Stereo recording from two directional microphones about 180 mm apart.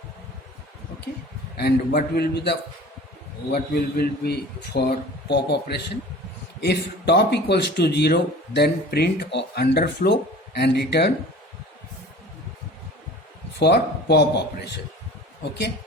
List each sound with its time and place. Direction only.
1.5 s a man's voice: 65° left (ahead or behind)
13.6 s a man's voice: 70° left (ahead or behind)